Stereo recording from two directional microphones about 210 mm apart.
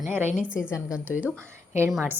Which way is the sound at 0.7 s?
15° left (ahead or behind).